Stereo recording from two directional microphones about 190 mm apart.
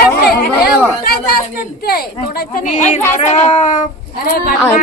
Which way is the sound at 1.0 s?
50° left (ahead or behind).